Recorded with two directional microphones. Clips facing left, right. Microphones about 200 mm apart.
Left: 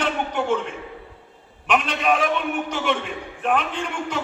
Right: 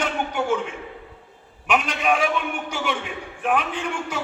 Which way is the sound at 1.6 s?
10° right (ahead or behind).